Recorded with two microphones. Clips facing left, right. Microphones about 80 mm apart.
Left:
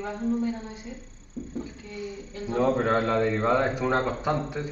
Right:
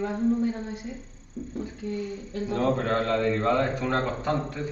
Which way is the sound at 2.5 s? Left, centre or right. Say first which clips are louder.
Left 2 dB; centre.